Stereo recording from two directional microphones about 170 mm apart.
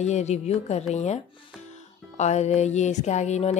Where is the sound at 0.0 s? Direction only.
40° left (ahead or behind).